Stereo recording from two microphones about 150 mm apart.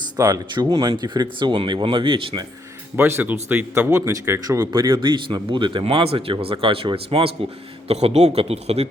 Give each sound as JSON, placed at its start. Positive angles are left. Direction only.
{"t": 0.2, "sound": "speech", "side_deg": -25}
{"t": 2.9, "sound": "speech", "side_deg": -15}
{"t": 4.7, "sound": "a man's voice", "side_deg": -30}